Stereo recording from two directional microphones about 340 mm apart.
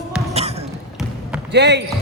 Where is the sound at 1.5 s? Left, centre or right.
Right.